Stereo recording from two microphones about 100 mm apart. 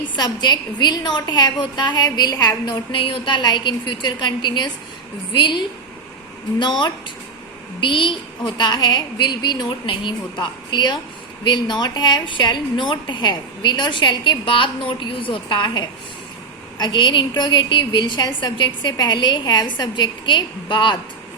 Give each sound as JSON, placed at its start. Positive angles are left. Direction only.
{"t": 0.2, "sound": "a woman's voice", "side_deg": 45}
{"t": 3.0, "sound": "a woman's voice", "side_deg": 60}